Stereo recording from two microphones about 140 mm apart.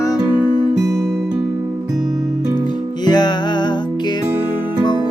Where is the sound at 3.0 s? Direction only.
30° left (ahead or behind).